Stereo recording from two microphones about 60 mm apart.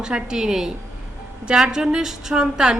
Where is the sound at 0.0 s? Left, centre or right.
Centre.